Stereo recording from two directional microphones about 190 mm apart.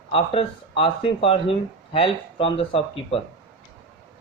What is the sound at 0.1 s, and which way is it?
Speech, 30° left (ahead or behind).